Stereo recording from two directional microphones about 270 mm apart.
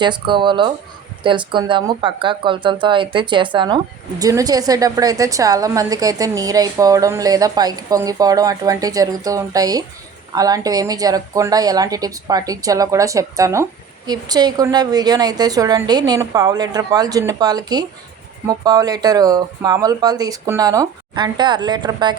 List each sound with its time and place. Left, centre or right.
0.0 s a woman's voice: centre